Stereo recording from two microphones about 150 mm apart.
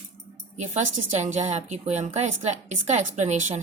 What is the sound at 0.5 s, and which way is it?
Speech, 50° right (ahead or behind).